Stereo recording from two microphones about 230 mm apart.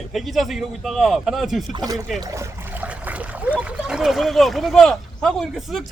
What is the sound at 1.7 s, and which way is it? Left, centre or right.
Speech, centre.